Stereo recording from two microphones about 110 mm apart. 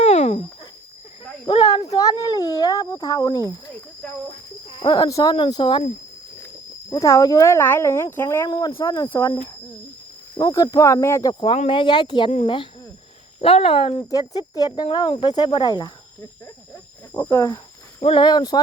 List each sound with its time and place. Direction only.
0.0 s a sound: 70° left (ahead or behind)
1.6 s a sound: 35° left (ahead or behind)
4.8 s speech: 40° left (ahead or behind)
6.9 s speech: 30° left (ahead or behind)
8.4 s speech: 40° left (ahead or behind)
9.0 s speech: 20° left (ahead or behind)
10.3 s speech: 35° left (ahead or behind)
11.3 s speech: 45° left (ahead or behind)
13.4 s speech: 60° left (ahead or behind)
13.9 s speech: 35° left (ahead or behind)
17.2 s speech: 25° left (ahead or behind)
18.0 s speech: 50° left (ahead or behind)